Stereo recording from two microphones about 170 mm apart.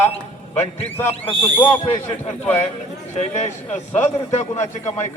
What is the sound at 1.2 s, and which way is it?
Speech, 30° left (ahead or behind).